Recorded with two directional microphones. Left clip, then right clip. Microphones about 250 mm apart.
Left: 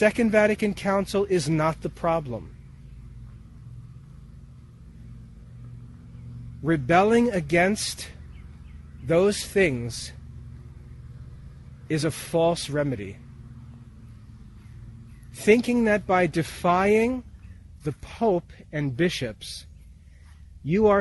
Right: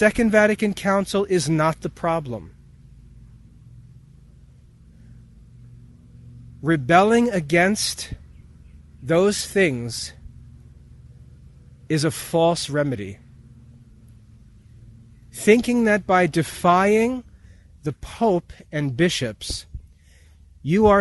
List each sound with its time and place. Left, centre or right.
0.0 s speech: right
6.6 s speech: right
11.9 s speech: right
15.4 s speech: right
20.7 s speech: right